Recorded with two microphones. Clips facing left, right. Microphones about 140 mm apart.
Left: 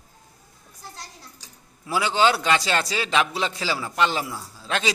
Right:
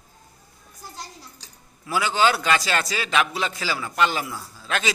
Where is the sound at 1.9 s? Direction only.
25° left (ahead or behind).